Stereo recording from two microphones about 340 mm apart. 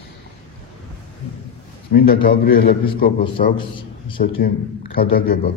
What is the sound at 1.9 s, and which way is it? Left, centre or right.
A man's voice, left.